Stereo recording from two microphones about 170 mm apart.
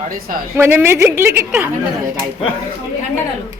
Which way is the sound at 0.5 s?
15° right (ahead or behind).